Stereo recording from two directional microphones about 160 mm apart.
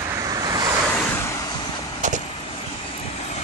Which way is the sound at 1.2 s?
20° left (ahead or behind).